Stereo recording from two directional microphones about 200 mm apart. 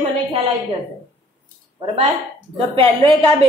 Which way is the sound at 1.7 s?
25° right (ahead or behind).